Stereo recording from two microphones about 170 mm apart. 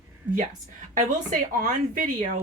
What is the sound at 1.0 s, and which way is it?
A woman's voice, 50° right (ahead or behind).